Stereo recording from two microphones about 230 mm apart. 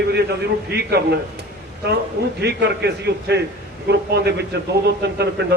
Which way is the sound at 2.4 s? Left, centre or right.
Right.